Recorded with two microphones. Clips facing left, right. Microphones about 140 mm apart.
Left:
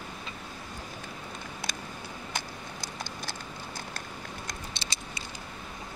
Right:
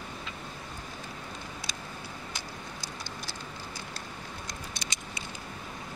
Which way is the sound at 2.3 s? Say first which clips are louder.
Left 3 dB; 55° left (ahead or behind).